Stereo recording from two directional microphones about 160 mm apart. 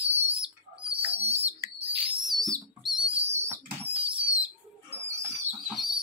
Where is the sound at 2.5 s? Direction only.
30° right (ahead or behind).